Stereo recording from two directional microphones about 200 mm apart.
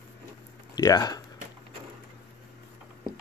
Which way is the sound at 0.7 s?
20° left (ahead or behind).